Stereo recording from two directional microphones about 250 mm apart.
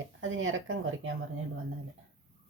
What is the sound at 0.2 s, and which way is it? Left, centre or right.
Speech, right.